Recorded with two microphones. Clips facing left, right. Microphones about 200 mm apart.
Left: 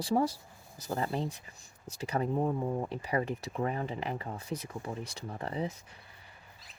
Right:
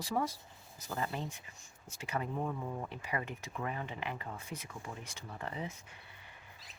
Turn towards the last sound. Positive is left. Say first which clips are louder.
# left 1 dB
turn(degrees=35)  # may be behind; listen again after turning